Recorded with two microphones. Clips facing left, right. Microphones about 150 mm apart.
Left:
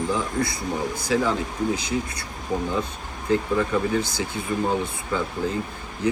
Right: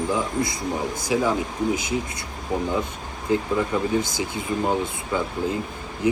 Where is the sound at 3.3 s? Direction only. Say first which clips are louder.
Even; 15° right (ahead or behind).